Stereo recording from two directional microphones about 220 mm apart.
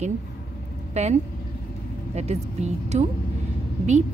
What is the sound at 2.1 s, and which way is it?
A woman's voice, 30° right (ahead or behind).